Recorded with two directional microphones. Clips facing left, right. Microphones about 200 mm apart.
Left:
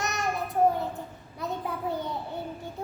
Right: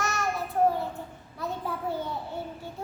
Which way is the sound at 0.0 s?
20° left (ahead or behind).